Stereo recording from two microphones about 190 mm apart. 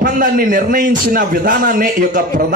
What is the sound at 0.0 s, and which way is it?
A man's voice, 45° right (ahead or behind).